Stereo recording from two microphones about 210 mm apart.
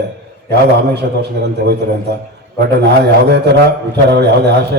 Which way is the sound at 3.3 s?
50° right (ahead or behind).